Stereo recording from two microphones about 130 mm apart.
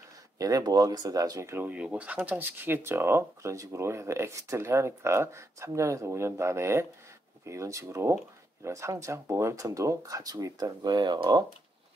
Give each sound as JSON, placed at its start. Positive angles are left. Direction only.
{"t": 0.4, "sound": "speech", "side_deg": -30}